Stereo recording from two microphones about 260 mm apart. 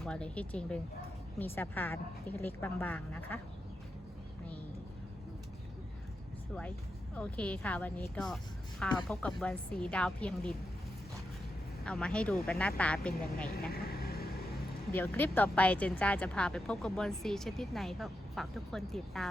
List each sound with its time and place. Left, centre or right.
0.0 s a woman's voice: centre
7.2 s speech: centre
11.9 s speech: centre
13.5 s speech: left
14.9 s speech: centre